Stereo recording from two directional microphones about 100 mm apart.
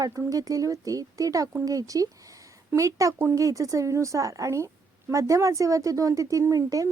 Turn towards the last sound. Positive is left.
turn(degrees=-35)  # may be behind; listen again after turning